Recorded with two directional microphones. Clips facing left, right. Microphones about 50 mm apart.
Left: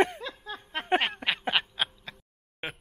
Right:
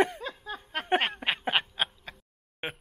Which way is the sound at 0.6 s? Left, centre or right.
Left.